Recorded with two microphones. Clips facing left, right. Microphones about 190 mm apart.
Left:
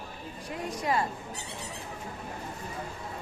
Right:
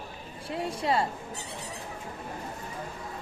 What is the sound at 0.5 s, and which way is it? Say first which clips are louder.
Speech: right 2 dB; 30° right (ahead or behind).